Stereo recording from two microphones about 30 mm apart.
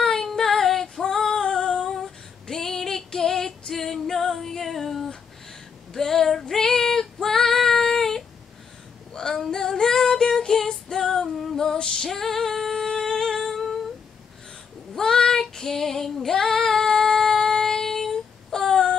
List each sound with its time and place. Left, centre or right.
0.0 s female singing: centre
1.4 s humming: left
1.9 s female singing: centre
10.7 s music: left
11.1 s female singing: centre
11.8 s female singing: left
12.1 s music: centre
15.0 s female singing: centre